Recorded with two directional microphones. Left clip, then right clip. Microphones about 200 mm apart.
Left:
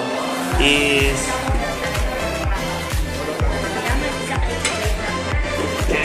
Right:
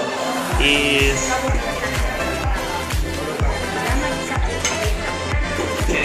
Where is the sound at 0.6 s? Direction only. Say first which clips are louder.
Left 1 dB; 35° left (ahead or behind).